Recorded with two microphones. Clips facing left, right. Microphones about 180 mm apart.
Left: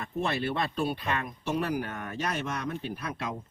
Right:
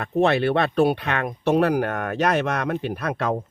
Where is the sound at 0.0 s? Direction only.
75° right (ahead or behind).